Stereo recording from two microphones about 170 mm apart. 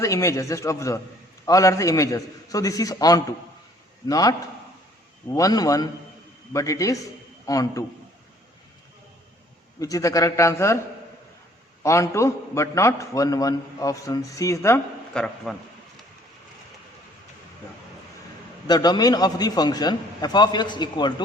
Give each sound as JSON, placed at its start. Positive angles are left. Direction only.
{"t": 0.0, "sound": "a man's voice", "side_deg": 20}
{"t": 9.8, "sound": "a man's voice", "side_deg": 20}
{"t": 11.8, "sound": "a man's voice", "side_deg": 15}
{"t": 15.1, "sound": "a man's voice", "side_deg": 5}
{"t": 18.7, "sound": "a man's voice", "side_deg": 25}